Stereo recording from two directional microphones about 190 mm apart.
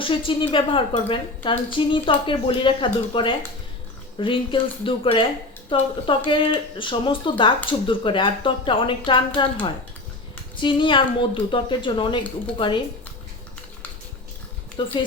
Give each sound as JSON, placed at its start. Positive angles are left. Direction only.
{"t": 0.0, "sound": "speech", "side_deg": 25}
{"t": 14.8, "sound": "speech", "side_deg": 25}